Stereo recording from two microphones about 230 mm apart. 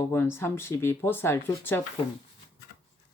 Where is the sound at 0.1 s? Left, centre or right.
Centre.